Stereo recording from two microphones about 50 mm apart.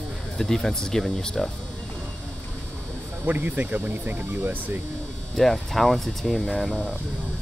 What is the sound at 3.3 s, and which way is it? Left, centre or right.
Speech, right.